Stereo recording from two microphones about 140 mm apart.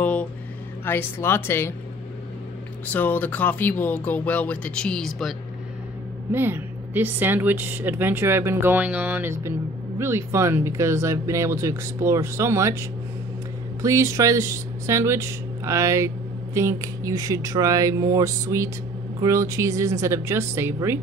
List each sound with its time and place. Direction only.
0.0 s a sound: 10° left (ahead or behind)
0.8 s speech: 15° left (ahead or behind)
2.9 s speech: 10° left (ahead or behind)
6.3 s speech: 15° right (ahead or behind)